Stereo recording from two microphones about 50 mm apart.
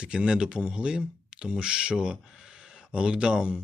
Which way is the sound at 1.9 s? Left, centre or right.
Centre.